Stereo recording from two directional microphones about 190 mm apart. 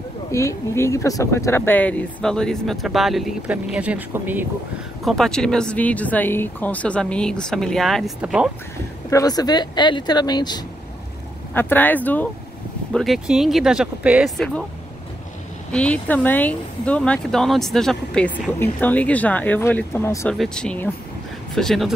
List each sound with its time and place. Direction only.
0.3 s speech: 15° left (ahead or behind); by 4.5 s 10° right (ahead or behind)
5.0 s speech: centre (ahead or behind)
9.1 s speech: 20° left (ahead or behind)
11.5 s speech: 10° left (ahead or behind)
15.7 s speech: 5° left (ahead or behind)
20.3 s speech: 5° left (ahead or behind)